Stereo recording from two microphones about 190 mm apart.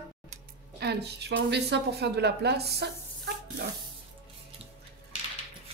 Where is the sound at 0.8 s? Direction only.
60° right (ahead or behind).